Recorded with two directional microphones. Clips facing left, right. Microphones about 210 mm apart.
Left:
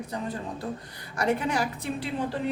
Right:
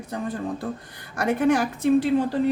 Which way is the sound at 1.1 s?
50° right (ahead or behind).